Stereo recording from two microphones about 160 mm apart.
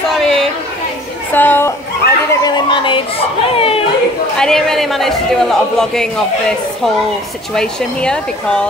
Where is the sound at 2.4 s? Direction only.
30° left (ahead or behind).